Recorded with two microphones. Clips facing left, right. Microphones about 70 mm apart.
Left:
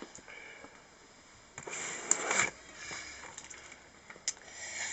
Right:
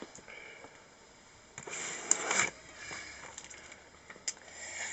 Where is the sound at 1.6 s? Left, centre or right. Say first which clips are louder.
Left 1 dB; centre.